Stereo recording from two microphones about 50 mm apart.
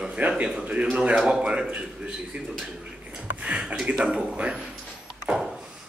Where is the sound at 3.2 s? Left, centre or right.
Right.